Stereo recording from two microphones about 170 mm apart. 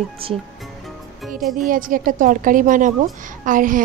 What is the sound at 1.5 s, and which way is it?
A woman's voice, 55° right (ahead or behind).